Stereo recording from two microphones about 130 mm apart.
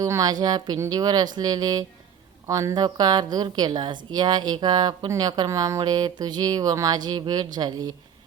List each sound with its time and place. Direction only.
0.0 s speech: 25° right (ahead or behind)